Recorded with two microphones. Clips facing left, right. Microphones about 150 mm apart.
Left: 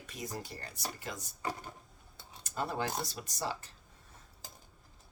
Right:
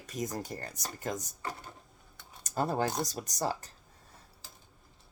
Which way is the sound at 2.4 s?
40° right (ahead or behind).